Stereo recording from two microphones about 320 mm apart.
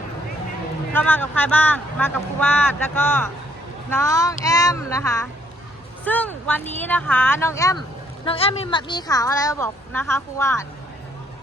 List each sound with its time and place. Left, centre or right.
0.9 s speech: centre